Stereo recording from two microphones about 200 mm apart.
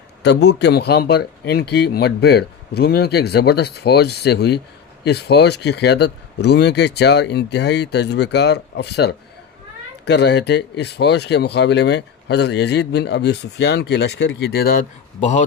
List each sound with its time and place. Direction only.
0.2 s speech: 60° left (ahead or behind); by 15.4 s 35° left (ahead or behind)